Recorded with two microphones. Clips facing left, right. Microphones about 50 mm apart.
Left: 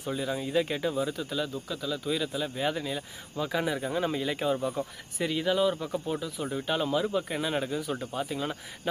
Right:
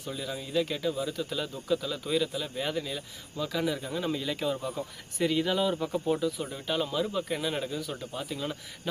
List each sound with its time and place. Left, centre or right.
0.0 s speech: left
1.3 s speech: centre
5.1 s speech: centre